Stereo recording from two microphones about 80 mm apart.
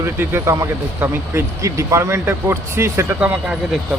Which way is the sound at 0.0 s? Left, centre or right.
Right.